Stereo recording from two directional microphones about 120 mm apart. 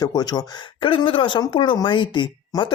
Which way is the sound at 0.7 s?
45° left (ahead or behind).